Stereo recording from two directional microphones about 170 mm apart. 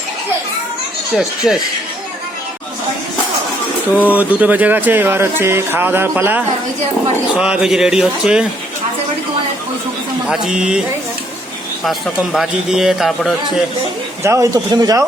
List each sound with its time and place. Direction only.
1.1 s a man's voice: 5° right (ahead or behind)
4.0 s a man's voice: 10° right (ahead or behind)
10.2 s a man's voice: 5° right (ahead or behind)
14.3 s speech: 20° right (ahead or behind)